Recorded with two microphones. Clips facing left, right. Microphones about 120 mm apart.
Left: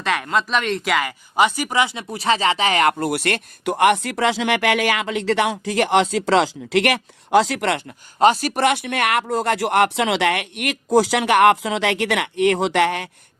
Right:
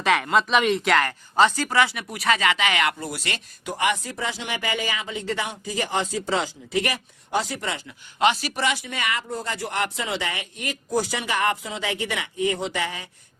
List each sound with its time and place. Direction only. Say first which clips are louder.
0.0 s speech: right 1 dB; centre (ahead or behind); by 2.9 s 40° left (ahead or behind)
3.0 s a man's voice: left 10 dB; 65° left (ahead or behind)
7.9 s a man's voice: left 5 dB; 45° left (ahead or behind); by 13.1 s 70° left (ahead or behind)